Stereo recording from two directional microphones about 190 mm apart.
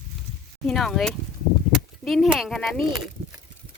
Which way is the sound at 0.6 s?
Centre (ahead or behind).